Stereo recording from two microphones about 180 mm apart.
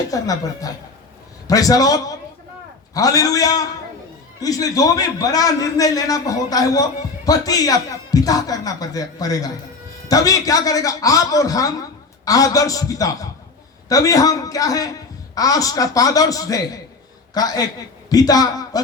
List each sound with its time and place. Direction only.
0.1 s a man's voice: 20° left (ahead or behind)